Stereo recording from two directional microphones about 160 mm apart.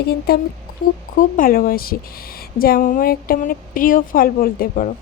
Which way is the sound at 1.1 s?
55° left (ahead or behind).